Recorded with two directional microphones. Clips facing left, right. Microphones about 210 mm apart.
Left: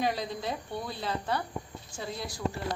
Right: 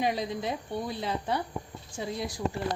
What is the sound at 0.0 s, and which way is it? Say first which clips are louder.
A woman's voice: right 2 dB; 15° right (ahead or behind).